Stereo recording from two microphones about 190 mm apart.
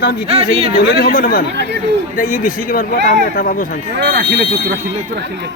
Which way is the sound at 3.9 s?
60° right (ahead or behind).